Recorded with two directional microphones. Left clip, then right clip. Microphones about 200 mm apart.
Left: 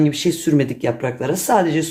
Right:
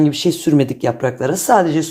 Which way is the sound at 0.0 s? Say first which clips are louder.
Right 2 dB; 25° right (ahead or behind).